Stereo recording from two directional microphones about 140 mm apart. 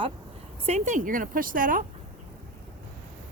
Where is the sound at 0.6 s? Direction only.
55° right (ahead or behind); by 1.8 s 80° right.